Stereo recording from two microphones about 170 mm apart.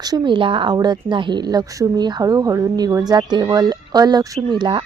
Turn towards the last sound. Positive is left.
turn(degrees=-25)  # may be behind; listen again after turning